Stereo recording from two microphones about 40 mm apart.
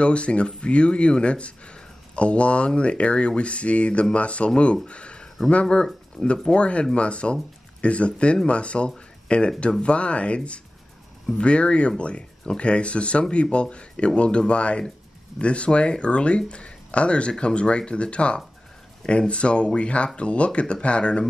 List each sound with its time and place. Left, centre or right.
0.0 s speech: left
4.8 s a sound: left
5.5 s speech: left